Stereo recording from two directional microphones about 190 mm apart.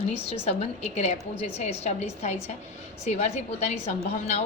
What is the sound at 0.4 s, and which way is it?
A woman's voice, 35° left (ahead or behind).